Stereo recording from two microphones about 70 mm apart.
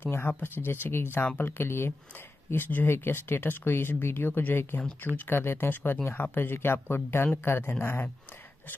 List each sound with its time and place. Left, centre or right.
0.0 s speech: left